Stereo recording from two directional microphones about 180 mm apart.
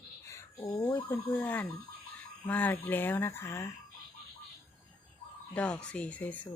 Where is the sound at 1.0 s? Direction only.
10° left (ahead or behind).